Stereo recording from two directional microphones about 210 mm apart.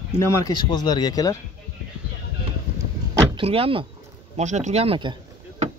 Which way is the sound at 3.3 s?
25° right (ahead or behind).